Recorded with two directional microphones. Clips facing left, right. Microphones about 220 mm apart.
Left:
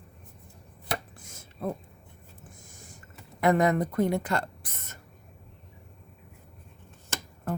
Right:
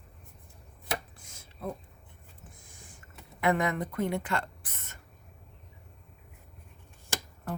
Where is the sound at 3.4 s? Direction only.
40° left (ahead or behind).